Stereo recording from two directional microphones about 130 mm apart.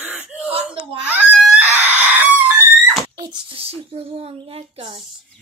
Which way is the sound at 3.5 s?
50° right (ahead or behind).